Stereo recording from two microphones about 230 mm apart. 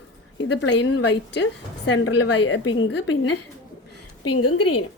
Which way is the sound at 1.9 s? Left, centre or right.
Left.